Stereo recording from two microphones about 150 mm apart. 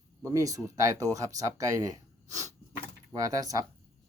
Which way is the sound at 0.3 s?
20° right (ahead or behind).